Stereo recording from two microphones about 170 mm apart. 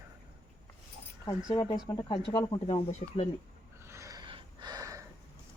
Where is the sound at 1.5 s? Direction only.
25° left (ahead or behind).